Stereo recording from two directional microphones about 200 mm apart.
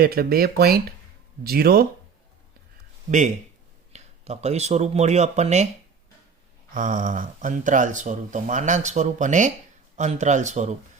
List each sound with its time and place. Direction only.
0.0 s speech: 50° right (ahead or behind)
3.1 s speech: 35° right (ahead or behind)
6.7 s speech: 40° right (ahead or behind)